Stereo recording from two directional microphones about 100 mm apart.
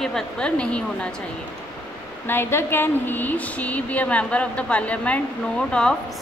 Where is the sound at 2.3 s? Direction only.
25° left (ahead or behind).